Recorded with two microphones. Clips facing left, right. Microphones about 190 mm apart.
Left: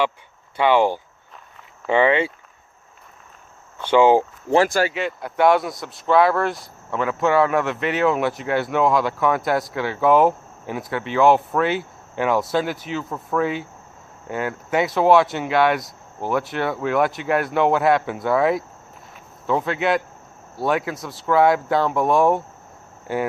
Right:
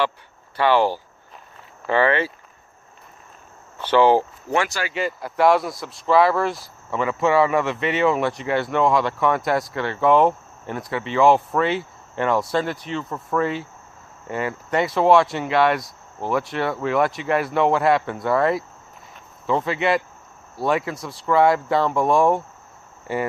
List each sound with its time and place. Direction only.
0.5 s speech: 15° left (ahead or behind)
3.9 s speech: 15° left (ahead or behind)
4.9 s speech: centre (ahead or behind)